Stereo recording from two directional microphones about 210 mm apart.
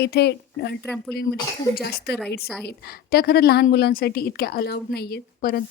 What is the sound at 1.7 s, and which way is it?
A woman's voice, 50° left (ahead or behind).